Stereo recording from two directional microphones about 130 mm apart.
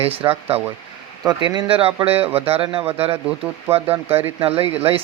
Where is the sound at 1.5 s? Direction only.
45° right (ahead or behind).